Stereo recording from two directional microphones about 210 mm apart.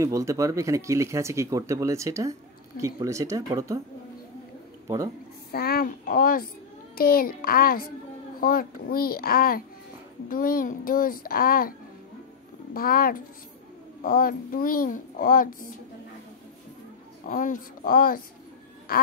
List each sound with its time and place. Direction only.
0.0 s speech: 15° right (ahead or behind)
4.8 s speech: 15° right (ahead or behind)
5.5 s a child's voice: 45° left (ahead or behind)
12.7 s a child's voice: 45° left (ahead or behind)
17.3 s a child's voice: 40° left (ahead or behind)